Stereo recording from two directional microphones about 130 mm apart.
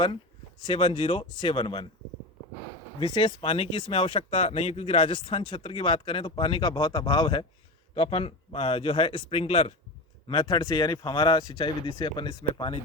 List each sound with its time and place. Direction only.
0.7 s speech: 45° left (ahead or behind)
3.0 s speech: 40° left (ahead or behind)
7.9 s speech: 45° left (ahead or behind)
10.2 s speech: 35° left (ahead or behind)